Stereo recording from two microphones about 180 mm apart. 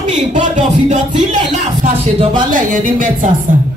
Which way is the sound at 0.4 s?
40° right (ahead or behind).